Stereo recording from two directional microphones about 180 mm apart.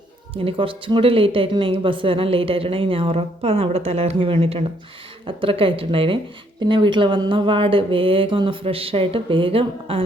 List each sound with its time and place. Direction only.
0.4 s a woman's voice: 30° right (ahead or behind)